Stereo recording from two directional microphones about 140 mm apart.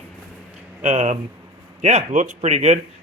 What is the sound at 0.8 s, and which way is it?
A man's voice, 55° right (ahead or behind).